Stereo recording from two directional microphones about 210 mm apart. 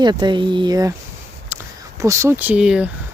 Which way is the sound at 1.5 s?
10° right (ahead or behind).